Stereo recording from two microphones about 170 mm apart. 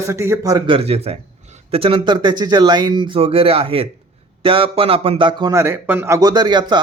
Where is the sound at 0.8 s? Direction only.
35° right (ahead or behind).